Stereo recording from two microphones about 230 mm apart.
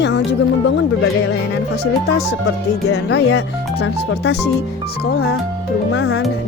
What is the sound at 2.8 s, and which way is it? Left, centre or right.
Speech, left.